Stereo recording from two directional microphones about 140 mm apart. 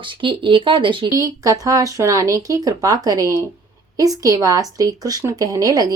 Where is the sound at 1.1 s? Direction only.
25° right (ahead or behind).